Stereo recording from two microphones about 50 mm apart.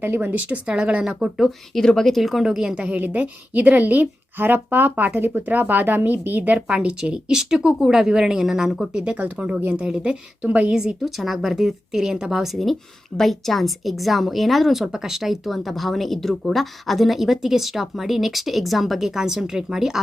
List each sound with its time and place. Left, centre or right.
0.0 s speech: right
0.4 s a woman's voice: right
1.0 s speech: centre
1.5 s speech: centre
2.1 s speech: centre
2.4 s speech: centre
2.7 s a woman's voice: right
9.1 s a woman's voice: right
11.0 s speech: centre